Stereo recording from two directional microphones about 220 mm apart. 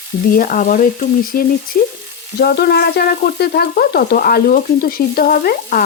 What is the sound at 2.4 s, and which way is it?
Sizzle, 45° left (ahead or behind).